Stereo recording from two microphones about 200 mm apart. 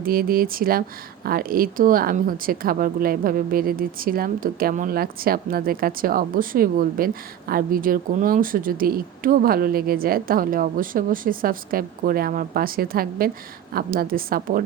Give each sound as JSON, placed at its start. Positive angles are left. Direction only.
{"t": 0.0, "sound": "speech", "side_deg": -45}